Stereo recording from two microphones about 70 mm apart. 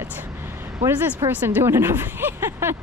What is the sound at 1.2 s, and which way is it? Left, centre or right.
A woman's voice, right.